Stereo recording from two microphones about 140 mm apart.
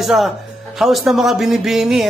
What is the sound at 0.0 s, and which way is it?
A man's voice, centre (ahead or behind).